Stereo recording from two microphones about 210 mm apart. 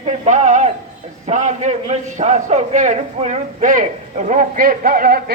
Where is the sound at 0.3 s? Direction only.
35° right (ahead or behind).